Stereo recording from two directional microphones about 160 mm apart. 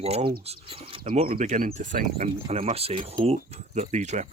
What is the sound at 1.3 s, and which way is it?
Speech, 60° right (ahead or behind).